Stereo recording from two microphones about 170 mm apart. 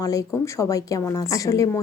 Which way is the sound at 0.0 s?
20° left (ahead or behind).